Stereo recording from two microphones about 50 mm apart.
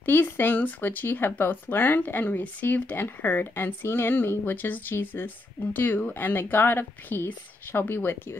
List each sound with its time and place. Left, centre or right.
0.0 s speech: left